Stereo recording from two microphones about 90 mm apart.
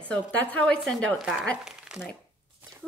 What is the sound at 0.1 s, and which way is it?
A woman's voice, 15° left (ahead or behind).